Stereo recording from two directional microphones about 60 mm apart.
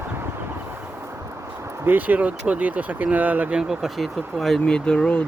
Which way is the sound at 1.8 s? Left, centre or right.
Right.